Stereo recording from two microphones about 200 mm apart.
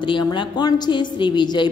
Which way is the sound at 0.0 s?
25° left (ahead or behind).